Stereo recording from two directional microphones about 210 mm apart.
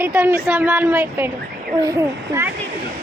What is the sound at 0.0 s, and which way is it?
Speech, 10° right (ahead or behind).